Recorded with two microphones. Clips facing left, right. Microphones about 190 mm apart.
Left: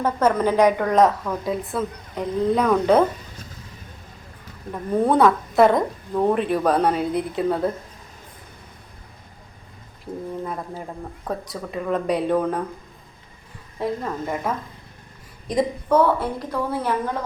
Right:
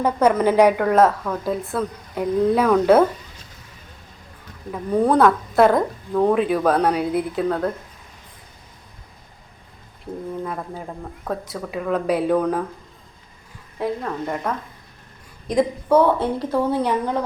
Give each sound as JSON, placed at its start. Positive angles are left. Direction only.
{"t": 0.0, "sound": "a woman's voice", "side_deg": -10}
{"t": 4.7, "sound": "a woman's voice", "side_deg": 0}
{"t": 10.1, "sound": "a woman's voice", "side_deg": 0}
{"t": 13.7, "sound": "a woman's voice", "side_deg": 0}
{"t": 16.1, "sound": "a woman's voice", "side_deg": -30}